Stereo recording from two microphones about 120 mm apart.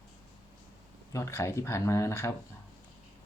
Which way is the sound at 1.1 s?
20° left (ahead or behind).